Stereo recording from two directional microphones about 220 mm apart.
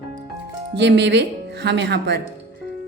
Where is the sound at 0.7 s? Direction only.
50° right (ahead or behind).